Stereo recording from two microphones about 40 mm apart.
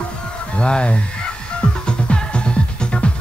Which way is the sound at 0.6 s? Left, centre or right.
Left.